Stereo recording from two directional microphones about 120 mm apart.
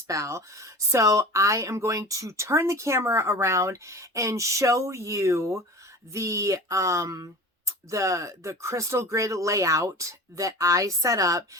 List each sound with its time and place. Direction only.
0.1 s speech: 25° right (ahead or behind)